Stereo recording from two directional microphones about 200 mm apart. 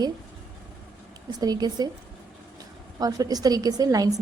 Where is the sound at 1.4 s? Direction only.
20° right (ahead or behind).